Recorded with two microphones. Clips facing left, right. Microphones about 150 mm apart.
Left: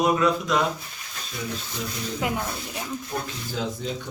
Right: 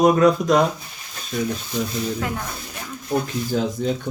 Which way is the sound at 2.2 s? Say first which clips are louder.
Even; 15° left (ahead or behind).